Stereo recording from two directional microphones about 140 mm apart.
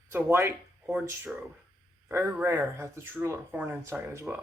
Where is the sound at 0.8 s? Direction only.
5° right (ahead or behind).